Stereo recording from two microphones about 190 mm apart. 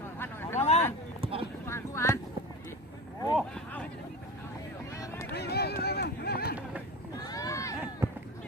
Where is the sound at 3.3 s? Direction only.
5° left (ahead or behind).